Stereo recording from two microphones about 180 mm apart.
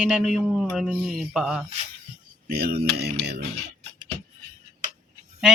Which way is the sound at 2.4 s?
60° right (ahead or behind).